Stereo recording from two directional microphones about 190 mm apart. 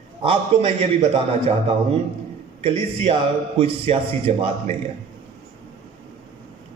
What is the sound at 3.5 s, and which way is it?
A man's voice, 30° right (ahead or behind).